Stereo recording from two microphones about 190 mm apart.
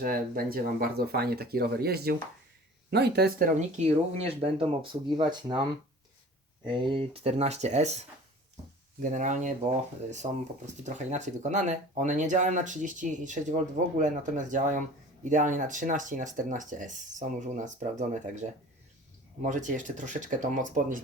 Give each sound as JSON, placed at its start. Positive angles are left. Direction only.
{"t": 0.0, "sound": "speech", "side_deg": -50}
{"t": 6.7, "sound": "speech", "side_deg": -25}
{"t": 9.0, "sound": "speech", "side_deg": -40}